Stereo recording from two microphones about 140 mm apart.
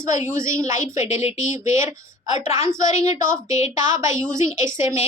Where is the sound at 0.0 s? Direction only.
20° right (ahead or behind).